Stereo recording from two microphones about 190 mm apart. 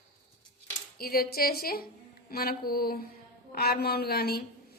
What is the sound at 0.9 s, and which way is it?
A woman's voice, 50° left (ahead or behind).